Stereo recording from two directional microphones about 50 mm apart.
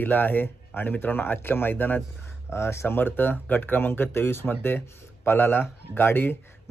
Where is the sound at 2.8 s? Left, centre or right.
Left.